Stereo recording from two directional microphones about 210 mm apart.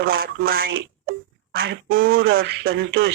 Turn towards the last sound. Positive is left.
turn(degrees=-55)  # may be behind; listen again after turning